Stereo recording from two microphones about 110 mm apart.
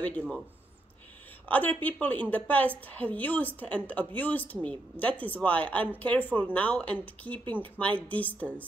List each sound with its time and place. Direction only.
1.5 s a woman's voice: 15° left (ahead or behind)